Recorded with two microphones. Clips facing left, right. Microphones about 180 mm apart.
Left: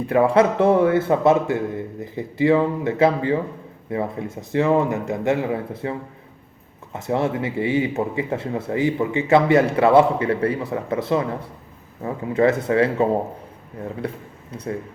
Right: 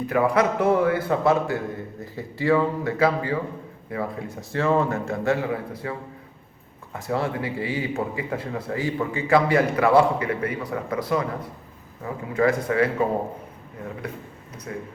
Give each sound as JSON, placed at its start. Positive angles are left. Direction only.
{"t": 0.1, "sound": "speech", "side_deg": 25}
{"t": 6.9, "sound": "speech", "side_deg": 20}